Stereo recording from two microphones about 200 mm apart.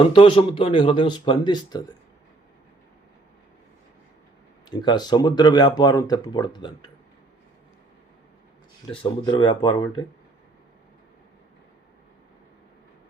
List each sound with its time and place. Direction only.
0.1 s speech: 25° left (ahead or behind)
4.7 s speech: 20° left (ahead or behind)
9.0 s speech: 20° left (ahead or behind)